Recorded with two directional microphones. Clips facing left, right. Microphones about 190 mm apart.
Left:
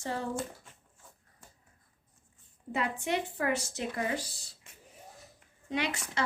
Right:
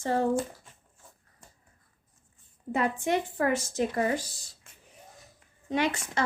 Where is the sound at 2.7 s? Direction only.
45° right (ahead or behind).